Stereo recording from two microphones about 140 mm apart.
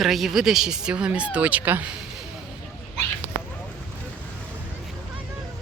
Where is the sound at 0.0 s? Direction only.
Centre (ahead or behind).